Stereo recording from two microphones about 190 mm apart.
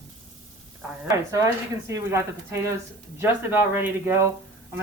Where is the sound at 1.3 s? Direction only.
15° right (ahead or behind).